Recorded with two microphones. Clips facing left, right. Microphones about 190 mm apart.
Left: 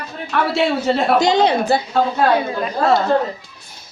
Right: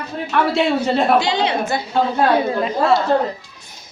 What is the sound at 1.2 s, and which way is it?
Speech, 40° left (ahead or behind).